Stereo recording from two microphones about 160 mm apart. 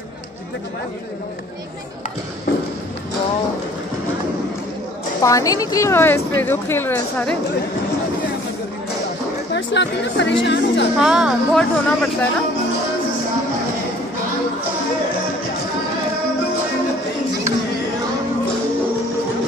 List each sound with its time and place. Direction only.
5.2 s a woman's voice: 20° left (ahead or behind)
9.5 s speech: 90° left
11.0 s speech: 5° right (ahead or behind)